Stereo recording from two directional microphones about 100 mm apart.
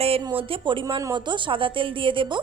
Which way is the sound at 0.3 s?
65° right (ahead or behind).